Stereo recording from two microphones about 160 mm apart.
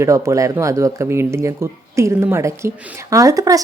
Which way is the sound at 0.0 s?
20° right (ahead or behind).